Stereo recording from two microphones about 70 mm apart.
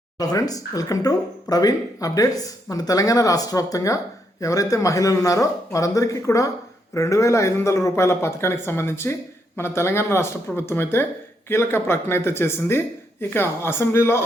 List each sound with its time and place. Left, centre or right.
0.2 s speech: left